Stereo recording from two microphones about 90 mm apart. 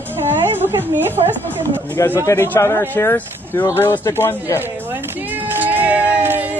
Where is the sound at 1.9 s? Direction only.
25° left (ahead or behind).